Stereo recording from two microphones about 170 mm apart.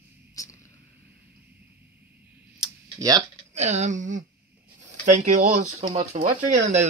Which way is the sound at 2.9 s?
20° right (ahead or behind).